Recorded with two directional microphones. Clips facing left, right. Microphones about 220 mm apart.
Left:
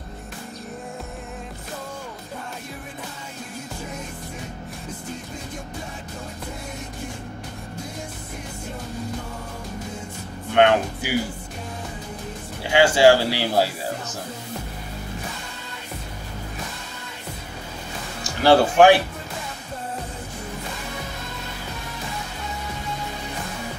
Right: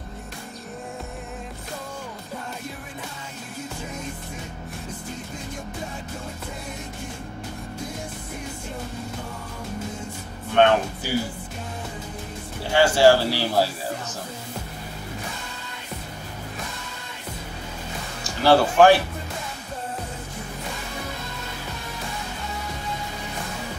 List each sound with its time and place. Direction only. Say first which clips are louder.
10.5 s a man's voice: left 1 dB; 15° left (ahead or behind)
12.7 s a man's voice: left 1 dB; 15° left (ahead or behind)
18.4 s a man's voice: left 1 dB; 15° left (ahead or behind)